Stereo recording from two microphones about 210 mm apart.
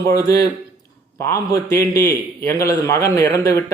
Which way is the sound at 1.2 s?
15° left (ahead or behind).